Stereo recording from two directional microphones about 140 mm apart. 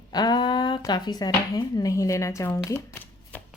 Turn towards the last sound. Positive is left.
turn(degrees=10)  # may be behind; listen again after turning